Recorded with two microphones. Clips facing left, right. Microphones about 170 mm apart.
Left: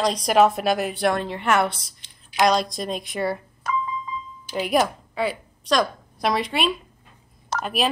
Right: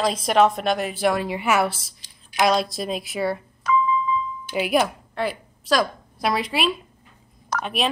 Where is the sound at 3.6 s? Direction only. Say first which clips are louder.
Right 7 dB; 50° left (ahead or behind).